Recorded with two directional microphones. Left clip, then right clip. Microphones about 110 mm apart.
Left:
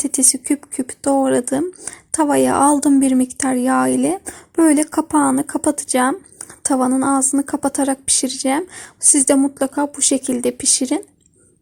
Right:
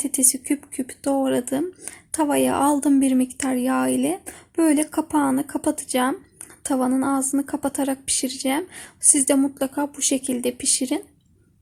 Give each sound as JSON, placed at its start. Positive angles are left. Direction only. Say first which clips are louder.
{"t": 0.0, "sound": "speech", "louder": "left 5 dB", "side_deg": 35}